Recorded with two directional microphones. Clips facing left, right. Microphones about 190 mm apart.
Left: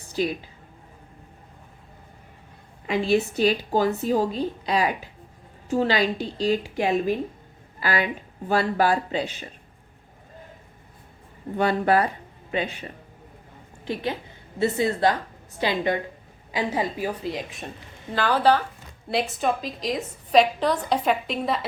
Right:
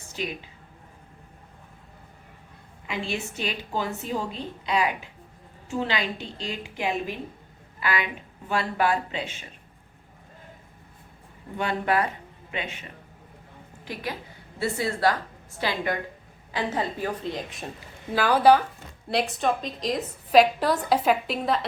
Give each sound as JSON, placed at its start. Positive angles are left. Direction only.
{"t": 0.0, "sound": "a sound", "side_deg": 35}
{"t": 2.8, "sound": "a woman's voice", "side_deg": 40}
{"t": 11.5, "sound": "speech", "side_deg": 35}
{"t": 13.8, "sound": "a woman's voice", "side_deg": 25}
{"t": 18.1, "sound": "speech", "side_deg": -10}
{"t": 19.0, "sound": "a woman's voice", "side_deg": 0}